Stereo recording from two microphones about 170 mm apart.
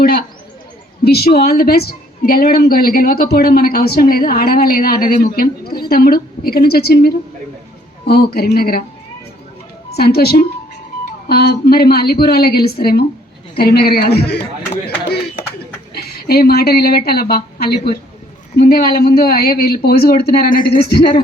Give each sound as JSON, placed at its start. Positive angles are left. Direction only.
{"t": 0.0, "sound": "a man's voice", "side_deg": 65}
{"t": 9.9, "sound": "speech", "side_deg": 65}
{"t": 16.0, "sound": "a woman's voice", "side_deg": 65}